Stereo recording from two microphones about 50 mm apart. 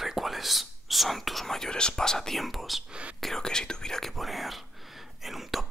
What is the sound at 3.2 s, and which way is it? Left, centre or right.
Whispering, centre.